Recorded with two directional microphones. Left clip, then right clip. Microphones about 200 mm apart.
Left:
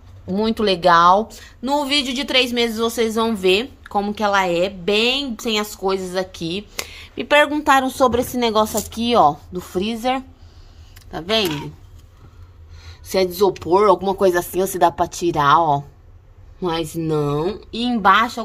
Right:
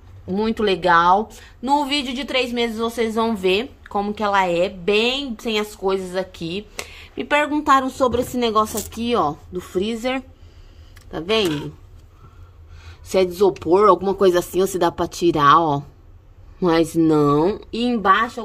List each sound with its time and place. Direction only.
0.3 s a woman's voice: centre (ahead or behind)
12.8 s speech: 5° right (ahead or behind)
18.0 s speech: 10° left (ahead or behind)